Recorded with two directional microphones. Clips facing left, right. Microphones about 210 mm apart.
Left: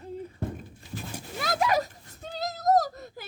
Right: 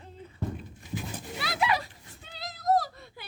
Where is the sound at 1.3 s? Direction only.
45° left (ahead or behind).